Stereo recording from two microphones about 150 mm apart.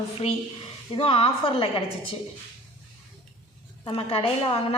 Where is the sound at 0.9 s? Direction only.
40° left (ahead or behind).